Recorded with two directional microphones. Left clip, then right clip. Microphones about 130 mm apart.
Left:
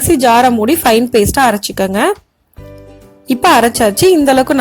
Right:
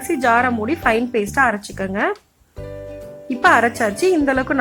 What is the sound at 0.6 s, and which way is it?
Speech, 60° left (ahead or behind).